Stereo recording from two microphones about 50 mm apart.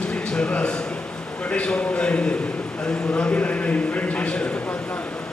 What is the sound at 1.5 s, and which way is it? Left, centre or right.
A man's voice, left.